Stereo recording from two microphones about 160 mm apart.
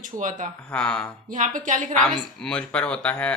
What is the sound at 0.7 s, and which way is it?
Speech, 5° left (ahead or behind).